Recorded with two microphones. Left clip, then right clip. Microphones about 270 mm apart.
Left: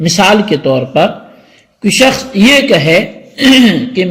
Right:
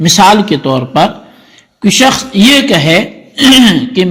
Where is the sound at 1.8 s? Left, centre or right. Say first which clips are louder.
Right 1 dB; right.